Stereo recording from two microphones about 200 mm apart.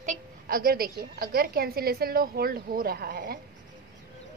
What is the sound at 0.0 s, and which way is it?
A woman's voice, 40° right (ahead or behind).